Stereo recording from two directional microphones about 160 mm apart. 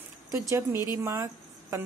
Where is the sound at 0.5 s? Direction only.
15° right (ahead or behind).